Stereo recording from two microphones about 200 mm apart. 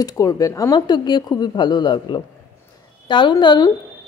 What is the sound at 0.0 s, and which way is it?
A woman's voice, 15° left (ahead or behind).